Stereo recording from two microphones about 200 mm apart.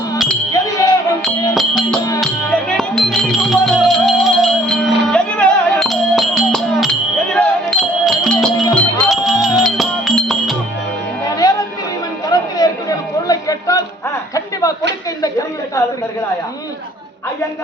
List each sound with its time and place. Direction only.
0.5 s music: 15° left (ahead or behind)
1.5 s music: centre (ahead or behind)
12.3 s chatter: 20° left (ahead or behind)
13.2 s music: 15° left (ahead or behind)
15.2 s a sound: 15° left (ahead or behind)